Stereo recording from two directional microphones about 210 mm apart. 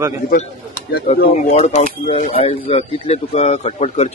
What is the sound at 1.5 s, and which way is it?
Speech, 30° left (ahead or behind).